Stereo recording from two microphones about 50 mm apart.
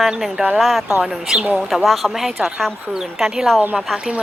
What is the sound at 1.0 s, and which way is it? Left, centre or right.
Speech, centre.